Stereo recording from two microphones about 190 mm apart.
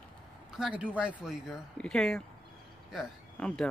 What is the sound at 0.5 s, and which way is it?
Speech, 5° right (ahead or behind).